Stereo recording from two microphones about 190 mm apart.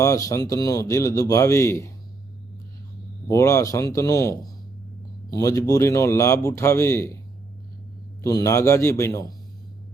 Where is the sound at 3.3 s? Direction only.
15° left (ahead or behind).